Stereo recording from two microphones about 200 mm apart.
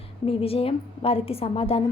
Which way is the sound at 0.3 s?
30° left (ahead or behind).